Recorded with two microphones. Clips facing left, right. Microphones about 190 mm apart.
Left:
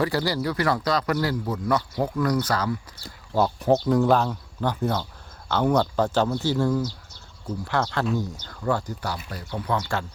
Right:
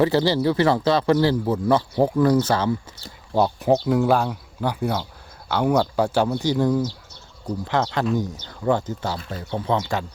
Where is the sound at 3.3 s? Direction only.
15° right (ahead or behind).